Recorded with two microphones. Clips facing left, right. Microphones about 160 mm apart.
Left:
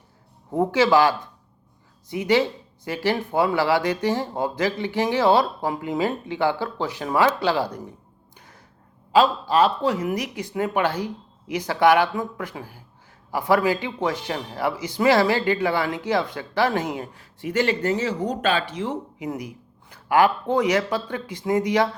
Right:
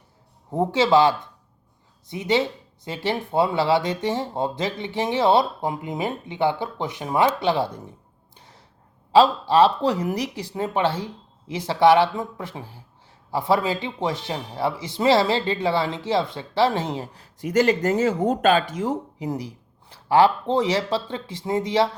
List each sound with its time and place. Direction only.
0.5 s speech: 25° right (ahead or behind)
8.4 s gasp: 25° right (ahead or behind)
9.1 s speech: 35° right (ahead or behind)